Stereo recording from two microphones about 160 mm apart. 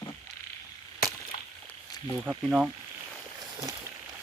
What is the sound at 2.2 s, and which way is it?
Speech, 10° right (ahead or behind).